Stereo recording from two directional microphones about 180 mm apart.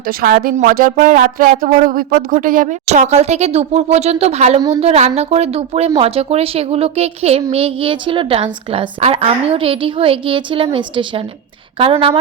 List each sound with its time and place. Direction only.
0.1 s a woman's voice: 55° right (ahead or behind); by 12.1 s 30° right (ahead or behind)